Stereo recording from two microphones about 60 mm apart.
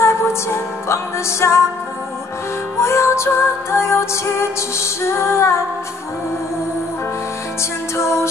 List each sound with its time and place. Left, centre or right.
0.0 s music: left
2.8 s music: left
8.0 s music: left